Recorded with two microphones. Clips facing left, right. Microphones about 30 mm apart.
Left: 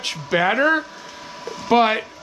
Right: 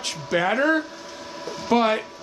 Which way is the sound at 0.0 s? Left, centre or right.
Centre.